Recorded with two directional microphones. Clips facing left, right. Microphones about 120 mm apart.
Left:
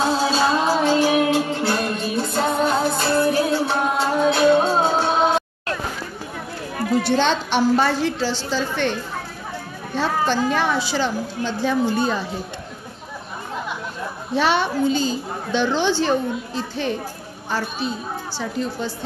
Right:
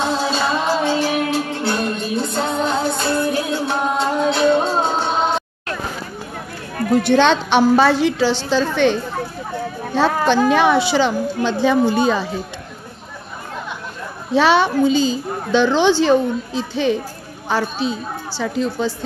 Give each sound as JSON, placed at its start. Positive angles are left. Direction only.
{"t": 0.2, "sound": "music", "side_deg": 10}
{"t": 7.0, "sound": "a woman's voice", "side_deg": -70}
{"t": 9.9, "sound": "a woman's voice", "side_deg": -80}
{"t": 14.3, "sound": "a woman's voice", "side_deg": -90}